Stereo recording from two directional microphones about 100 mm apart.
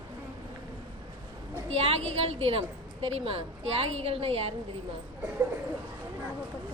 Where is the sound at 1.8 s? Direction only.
85° right.